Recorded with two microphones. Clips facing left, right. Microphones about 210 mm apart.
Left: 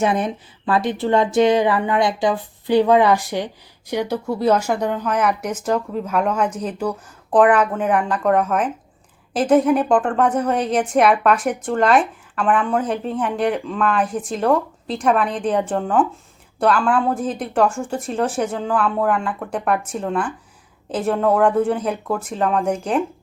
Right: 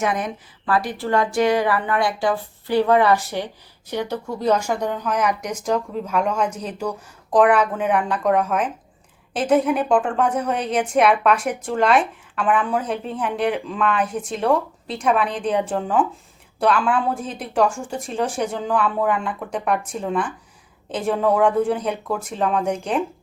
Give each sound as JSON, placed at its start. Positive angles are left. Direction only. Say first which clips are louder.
{"t": 0.0, "sound": "a woman's voice", "louder": "left 4 dB", "side_deg": 30}